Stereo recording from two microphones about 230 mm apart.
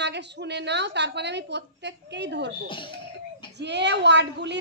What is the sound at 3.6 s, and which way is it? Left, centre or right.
Speech, right.